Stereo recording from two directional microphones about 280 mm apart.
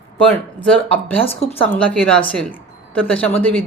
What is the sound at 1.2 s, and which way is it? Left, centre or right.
Speech, left.